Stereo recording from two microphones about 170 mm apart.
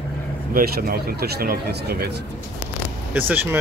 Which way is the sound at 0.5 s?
60° right (ahead or behind).